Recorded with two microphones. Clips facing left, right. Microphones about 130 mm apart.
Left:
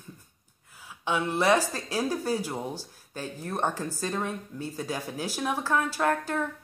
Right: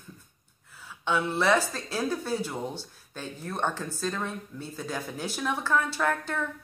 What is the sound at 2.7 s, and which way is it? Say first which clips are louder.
Speech: left 1 dB; 40° left (ahead or behind).